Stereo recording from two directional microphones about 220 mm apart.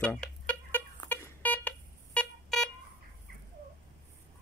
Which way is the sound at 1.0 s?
10° left (ahead or behind).